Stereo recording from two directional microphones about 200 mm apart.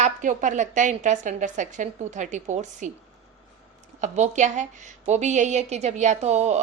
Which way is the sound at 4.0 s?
35° right (ahead or behind).